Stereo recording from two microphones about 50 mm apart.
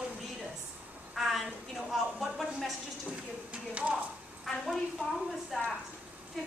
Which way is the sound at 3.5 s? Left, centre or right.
Right.